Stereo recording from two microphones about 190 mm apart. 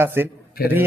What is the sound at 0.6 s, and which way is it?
Speech, 50° left (ahead or behind).